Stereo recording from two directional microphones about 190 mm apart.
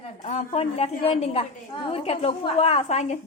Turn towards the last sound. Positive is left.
turn(degrees=35)  # may be behind; listen again after turning